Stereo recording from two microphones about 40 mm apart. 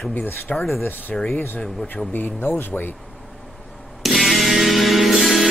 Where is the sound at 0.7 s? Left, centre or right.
Left.